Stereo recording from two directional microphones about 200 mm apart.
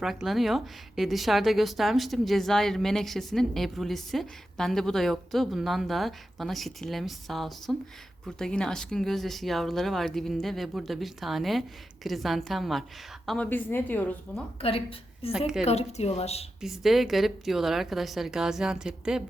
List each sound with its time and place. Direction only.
0.0 s speech: centre (ahead or behind)
14.6 s a woman's voice: 30° left (ahead or behind)
16.6 s speech: centre (ahead or behind)